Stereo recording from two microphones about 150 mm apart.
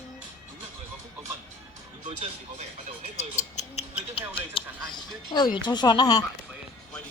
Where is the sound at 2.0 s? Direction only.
50° right (ahead or behind).